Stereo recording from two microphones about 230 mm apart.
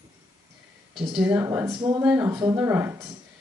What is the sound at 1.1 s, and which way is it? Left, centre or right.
Speech, centre.